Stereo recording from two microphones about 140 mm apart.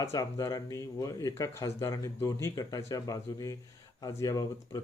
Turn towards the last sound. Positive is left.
turn(degrees=25)  # may be behind; listen again after turning